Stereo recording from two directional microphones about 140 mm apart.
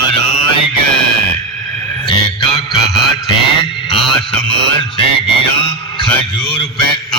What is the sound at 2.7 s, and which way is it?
Music, centre (ahead or behind).